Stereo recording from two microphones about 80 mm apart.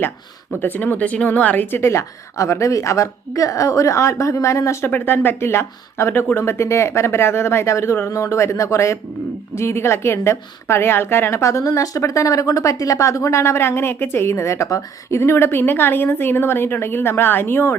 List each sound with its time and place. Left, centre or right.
0.6 s a woman's voice: left
4.9 s a woman's voice: left